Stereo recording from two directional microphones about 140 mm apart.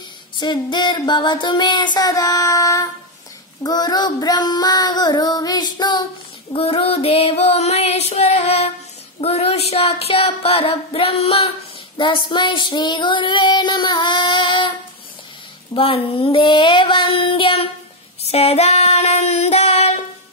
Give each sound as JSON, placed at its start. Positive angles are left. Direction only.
{"t": 0.4, "sound": "child singing", "side_deg": 35}
{"t": 6.5, "sound": "child singing", "side_deg": 45}
{"t": 15.7, "sound": "child singing", "side_deg": 40}
{"t": 18.2, "sound": "female singing", "side_deg": 50}